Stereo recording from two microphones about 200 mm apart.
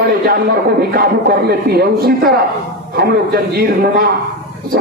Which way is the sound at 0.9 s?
50° right (ahead or behind).